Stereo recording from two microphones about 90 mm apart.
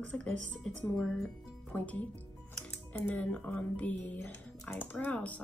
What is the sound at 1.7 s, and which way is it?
Speech, 20° left (ahead or behind).